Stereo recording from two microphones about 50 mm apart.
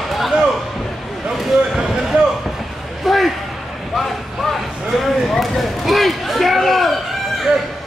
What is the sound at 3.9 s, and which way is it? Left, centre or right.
Basketball bounce, centre.